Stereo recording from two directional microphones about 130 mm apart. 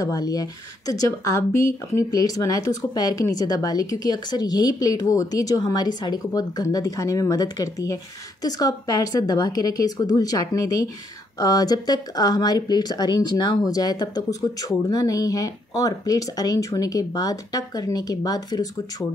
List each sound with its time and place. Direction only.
0.0 s speech: 30° left (ahead or behind)